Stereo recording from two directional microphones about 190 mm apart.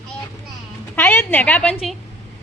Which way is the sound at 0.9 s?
10° left (ahead or behind).